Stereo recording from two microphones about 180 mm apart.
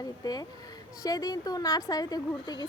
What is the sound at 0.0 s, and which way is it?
A woman's voice, 20° left (ahead or behind).